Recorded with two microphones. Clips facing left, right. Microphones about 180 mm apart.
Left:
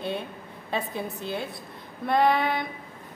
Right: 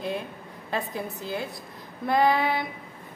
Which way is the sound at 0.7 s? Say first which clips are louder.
Even; centre (ahead or behind).